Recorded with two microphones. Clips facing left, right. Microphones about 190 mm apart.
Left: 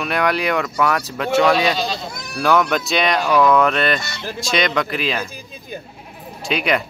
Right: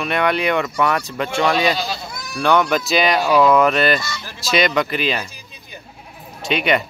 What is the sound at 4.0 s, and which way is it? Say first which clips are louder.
Speech: left 2 dB; 60° left (ahead or behind).